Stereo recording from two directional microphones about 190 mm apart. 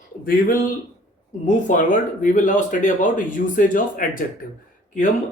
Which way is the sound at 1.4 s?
45° left (ahead or behind).